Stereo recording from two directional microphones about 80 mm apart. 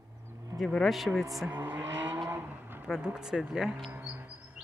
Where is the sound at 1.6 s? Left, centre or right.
Right.